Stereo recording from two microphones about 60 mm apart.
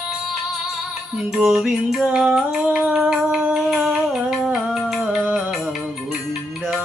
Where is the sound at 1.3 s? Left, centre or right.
Centre.